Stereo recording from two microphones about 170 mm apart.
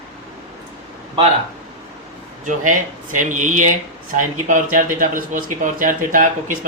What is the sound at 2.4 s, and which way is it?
A man's voice, 50° right (ahead or behind).